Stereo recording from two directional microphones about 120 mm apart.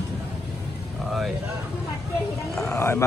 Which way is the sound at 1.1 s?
Centre (ahead or behind).